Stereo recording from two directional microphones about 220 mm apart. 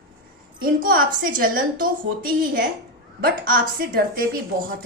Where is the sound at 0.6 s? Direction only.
40° right (ahead or behind).